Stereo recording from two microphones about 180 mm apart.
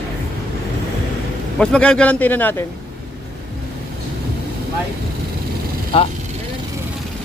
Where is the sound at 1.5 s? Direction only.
5° left (ahead or behind).